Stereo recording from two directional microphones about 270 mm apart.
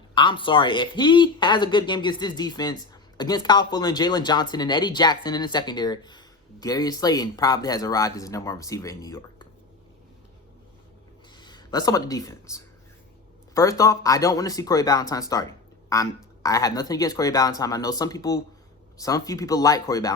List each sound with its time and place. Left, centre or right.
0.1 s speech: centre
11.3 s speech: centre